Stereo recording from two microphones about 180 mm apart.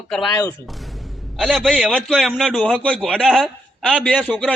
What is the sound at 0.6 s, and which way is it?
A man's voice, centre (ahead or behind).